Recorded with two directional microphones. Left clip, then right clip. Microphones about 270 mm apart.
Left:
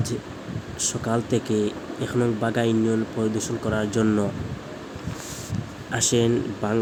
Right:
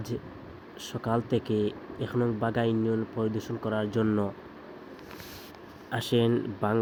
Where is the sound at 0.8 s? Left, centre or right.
Centre.